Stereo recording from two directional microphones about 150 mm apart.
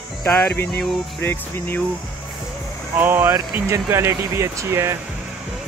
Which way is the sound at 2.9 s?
15° right (ahead or behind).